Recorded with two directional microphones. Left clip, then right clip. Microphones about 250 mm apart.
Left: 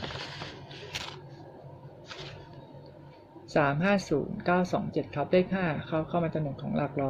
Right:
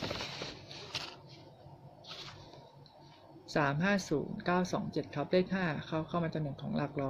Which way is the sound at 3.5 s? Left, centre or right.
Centre.